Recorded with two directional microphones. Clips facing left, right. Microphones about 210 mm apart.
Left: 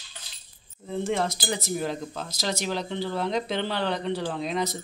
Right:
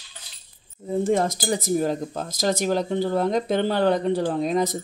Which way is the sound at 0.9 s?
45° right (ahead or behind).